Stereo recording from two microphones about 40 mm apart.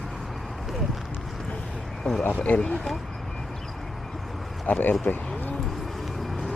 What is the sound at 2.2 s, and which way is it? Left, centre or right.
Speech, left.